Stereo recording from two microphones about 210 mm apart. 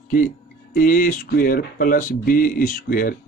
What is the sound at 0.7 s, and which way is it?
Speech, 40° left (ahead or behind).